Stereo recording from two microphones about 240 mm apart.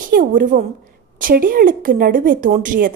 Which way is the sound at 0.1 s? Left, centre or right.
Right.